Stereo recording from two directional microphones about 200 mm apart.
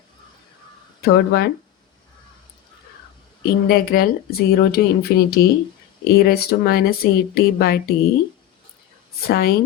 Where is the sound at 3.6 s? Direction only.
50° left (ahead or behind).